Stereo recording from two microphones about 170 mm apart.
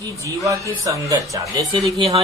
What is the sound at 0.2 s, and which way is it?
Speech, 20° right (ahead or behind).